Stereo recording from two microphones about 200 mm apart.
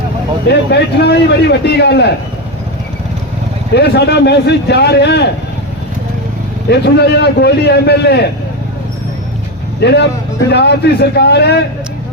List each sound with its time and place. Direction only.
0.7 s a man's voice: 55° left (ahead or behind)
3.8 s a man's voice: 55° left (ahead or behind)
6.7 s a man's voice: 55° left (ahead or behind)
9.8 s a man's voice: 60° left (ahead or behind)